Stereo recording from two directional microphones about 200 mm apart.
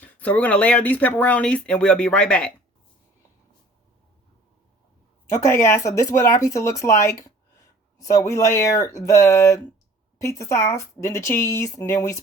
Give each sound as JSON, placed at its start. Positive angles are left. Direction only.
{"t": 0.0, "sound": "speech", "side_deg": 10}
{"t": 5.3, "sound": "speech", "side_deg": 15}